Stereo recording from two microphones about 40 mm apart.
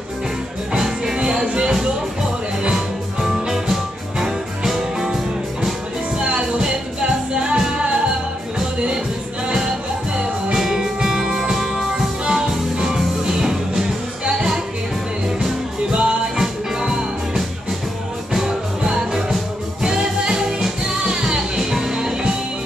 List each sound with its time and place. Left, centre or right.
0.7 s music: centre
2.7 s music: centre
6.1 s music: right
9.5 s music: centre
21.5 s music: centre